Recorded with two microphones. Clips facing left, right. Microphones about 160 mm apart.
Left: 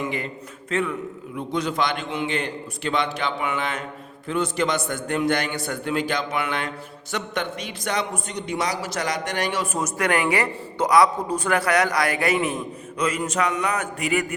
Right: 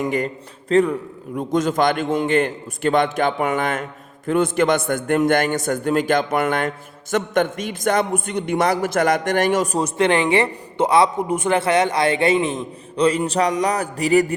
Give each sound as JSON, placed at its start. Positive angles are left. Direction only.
{"t": 0.0, "sound": "a man's voice", "side_deg": -45}